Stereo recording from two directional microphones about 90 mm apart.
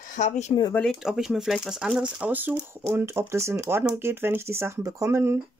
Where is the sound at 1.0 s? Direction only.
5° right (ahead or behind).